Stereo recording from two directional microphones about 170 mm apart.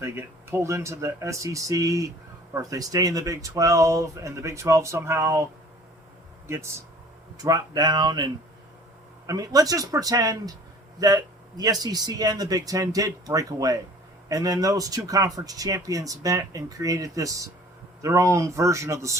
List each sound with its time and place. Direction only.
0.0 s speech: 15° right (ahead or behind)
6.5 s speech: 15° right (ahead or behind)